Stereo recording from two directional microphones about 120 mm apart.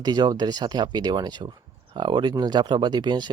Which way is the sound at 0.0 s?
35° right (ahead or behind).